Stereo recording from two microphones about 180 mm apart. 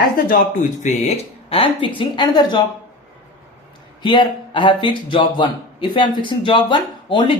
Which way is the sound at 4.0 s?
25° left (ahead or behind).